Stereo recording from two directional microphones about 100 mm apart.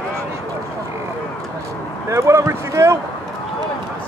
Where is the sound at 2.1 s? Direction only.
30° right (ahead or behind).